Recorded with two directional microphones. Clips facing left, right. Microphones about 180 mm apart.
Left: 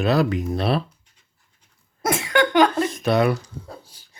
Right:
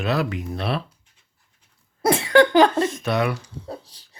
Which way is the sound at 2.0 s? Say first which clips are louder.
Right 5 dB; 30° right (ahead or behind).